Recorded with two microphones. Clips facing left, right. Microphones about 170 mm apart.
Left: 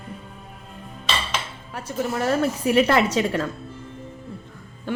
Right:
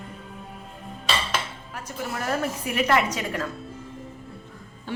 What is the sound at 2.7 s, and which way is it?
Speech, 30° left (ahead or behind).